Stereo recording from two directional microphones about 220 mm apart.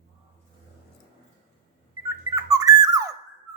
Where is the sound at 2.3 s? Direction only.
15° right (ahead or behind).